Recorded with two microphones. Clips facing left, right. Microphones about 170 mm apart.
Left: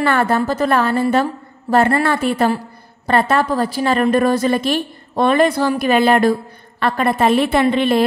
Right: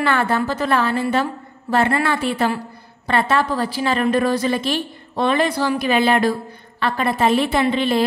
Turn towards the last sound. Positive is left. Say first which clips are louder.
# left 3 dB
turn(degrees=55)  # may be behind; listen again after turning